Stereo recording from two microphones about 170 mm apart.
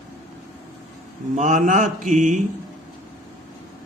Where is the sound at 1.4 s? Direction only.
50° right (ahead or behind).